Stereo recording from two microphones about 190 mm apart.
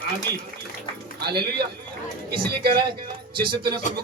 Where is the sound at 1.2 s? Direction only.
55° right (ahead or behind).